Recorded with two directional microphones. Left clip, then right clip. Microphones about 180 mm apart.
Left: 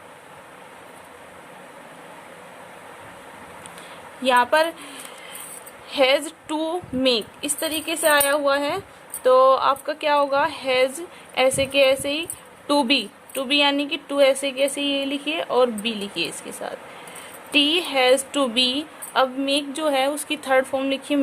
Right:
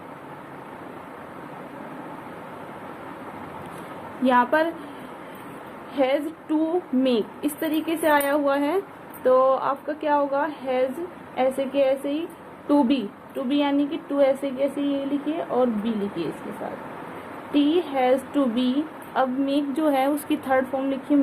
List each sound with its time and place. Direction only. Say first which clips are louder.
4.2 s speech: left 2 dB; 35° left (ahead or behind)
5.9 s a woman's voice: left 4 dB; 40° left (ahead or behind)
17.5 s a woman's voice: left 3 dB; 45° left (ahead or behind)